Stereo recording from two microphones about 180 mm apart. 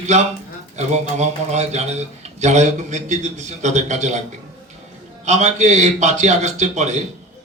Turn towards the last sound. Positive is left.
turn(degrees=-40)  # may be behind; listen again after turning